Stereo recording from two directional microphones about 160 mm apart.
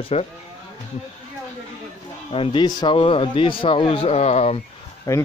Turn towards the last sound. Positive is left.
turn(degrees=20)  # may be behind; listen again after turning